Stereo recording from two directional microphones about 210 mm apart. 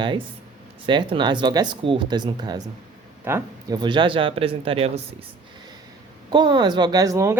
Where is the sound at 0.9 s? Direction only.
20° right (ahead or behind).